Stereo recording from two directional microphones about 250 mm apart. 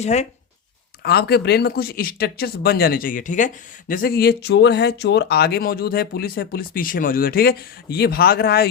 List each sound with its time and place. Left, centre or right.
0.0 s speech: left
1.0 s speech: left